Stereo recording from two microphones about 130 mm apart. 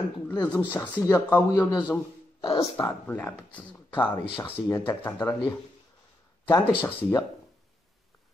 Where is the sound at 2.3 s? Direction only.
45° left (ahead or behind).